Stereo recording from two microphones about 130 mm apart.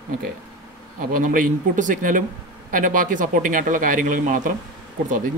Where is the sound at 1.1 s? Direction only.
90° right.